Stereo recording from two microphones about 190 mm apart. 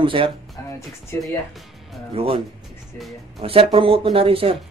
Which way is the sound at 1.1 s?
15° left (ahead or behind).